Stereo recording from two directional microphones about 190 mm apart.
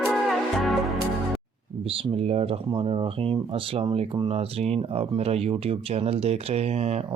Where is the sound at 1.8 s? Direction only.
30° right (ahead or behind).